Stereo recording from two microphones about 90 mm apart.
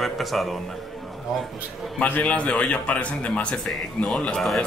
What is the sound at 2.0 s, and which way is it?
Speech, 15° left (ahead or behind).